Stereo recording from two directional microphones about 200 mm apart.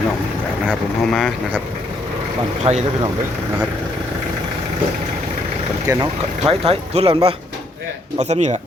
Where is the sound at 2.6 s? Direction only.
35° right (ahead or behind).